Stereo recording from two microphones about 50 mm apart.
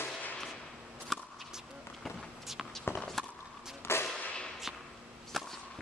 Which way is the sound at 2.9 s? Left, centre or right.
Left.